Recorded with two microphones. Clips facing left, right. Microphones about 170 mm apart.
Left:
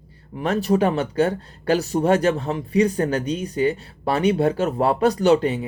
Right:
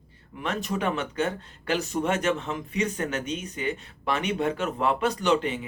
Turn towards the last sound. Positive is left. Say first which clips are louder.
# left 7 dB
turn(degrees=35)  # may be behind; listen again after turning